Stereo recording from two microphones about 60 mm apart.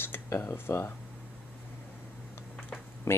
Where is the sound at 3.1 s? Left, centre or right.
Left.